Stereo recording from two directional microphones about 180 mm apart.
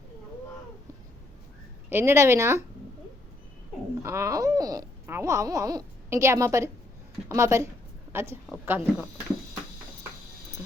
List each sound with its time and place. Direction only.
1.9 s speech: 15° right (ahead or behind)
4.0 s a woman's voice: 15° right (ahead or behind)